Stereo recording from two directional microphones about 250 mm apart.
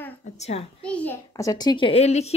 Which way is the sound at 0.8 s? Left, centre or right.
Centre.